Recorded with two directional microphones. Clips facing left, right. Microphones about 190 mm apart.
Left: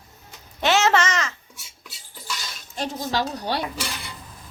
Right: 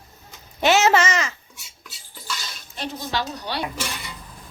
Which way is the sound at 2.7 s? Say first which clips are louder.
Left 2 dB; 40° left (ahead or behind).